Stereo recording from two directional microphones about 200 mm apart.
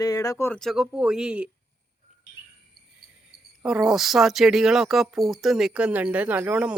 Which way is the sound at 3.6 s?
5° right (ahead or behind).